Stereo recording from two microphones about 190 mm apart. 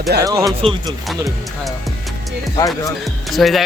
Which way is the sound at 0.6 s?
30° right (ahead or behind).